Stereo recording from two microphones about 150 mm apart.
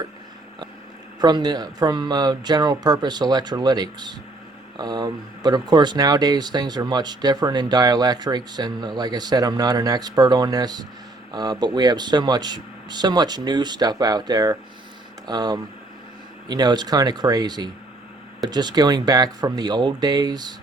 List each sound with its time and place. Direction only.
1.2 s speech: 25° right (ahead or behind)